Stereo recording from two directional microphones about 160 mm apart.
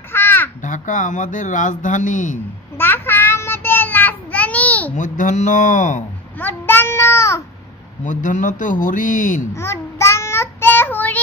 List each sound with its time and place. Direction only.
0.1 s caw: 15° left (ahead or behind)
0.6 s speech: 50° left (ahead or behind)
2.8 s child singing: 15° left (ahead or behind)
4.9 s speech: 50° left (ahead or behind)
6.3 s child singing: 10° left (ahead or behind)
8.0 s speech: 55° left (ahead or behind)
9.6 s child singing: 15° left (ahead or behind)